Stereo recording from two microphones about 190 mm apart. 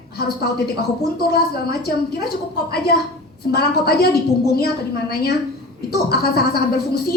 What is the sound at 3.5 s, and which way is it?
A woman's voice, 55° left (ahead or behind).